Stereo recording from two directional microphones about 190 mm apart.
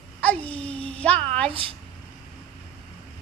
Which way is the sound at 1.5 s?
30° right (ahead or behind).